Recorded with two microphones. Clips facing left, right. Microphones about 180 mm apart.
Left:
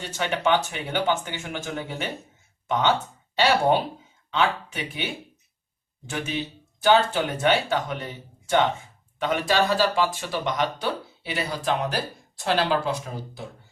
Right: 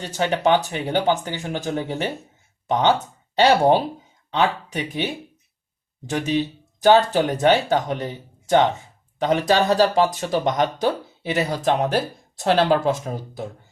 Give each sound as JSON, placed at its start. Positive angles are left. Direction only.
{"t": 0.0, "sound": "speech", "side_deg": -40}